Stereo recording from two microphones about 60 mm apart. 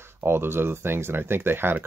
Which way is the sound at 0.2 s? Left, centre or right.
Right.